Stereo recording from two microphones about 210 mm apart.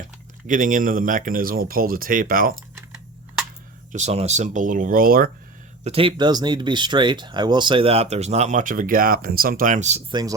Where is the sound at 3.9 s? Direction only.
30° right (ahead or behind).